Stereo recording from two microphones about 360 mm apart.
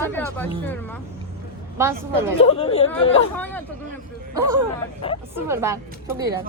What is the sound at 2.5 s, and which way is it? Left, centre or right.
Speech, centre.